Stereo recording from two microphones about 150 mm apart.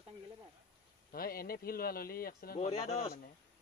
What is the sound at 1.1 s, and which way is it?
Speech, 80° left.